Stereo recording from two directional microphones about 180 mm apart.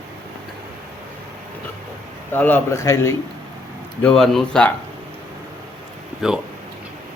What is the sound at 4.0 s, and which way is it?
Speech, 5° left (ahead or behind).